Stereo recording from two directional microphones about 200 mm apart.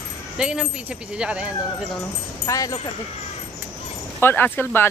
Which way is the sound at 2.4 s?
15° left (ahead or behind).